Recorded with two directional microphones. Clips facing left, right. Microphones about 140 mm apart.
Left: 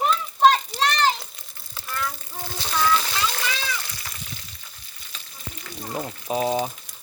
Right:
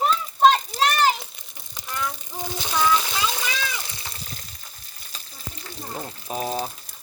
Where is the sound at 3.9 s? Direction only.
30° right (ahead or behind).